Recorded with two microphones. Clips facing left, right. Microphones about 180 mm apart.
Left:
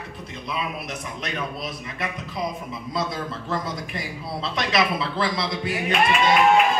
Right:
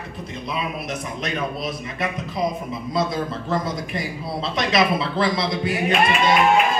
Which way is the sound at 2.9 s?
20° right (ahead or behind).